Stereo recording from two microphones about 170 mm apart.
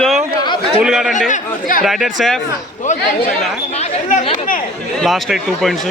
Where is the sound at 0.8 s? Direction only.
Centre (ahead or behind).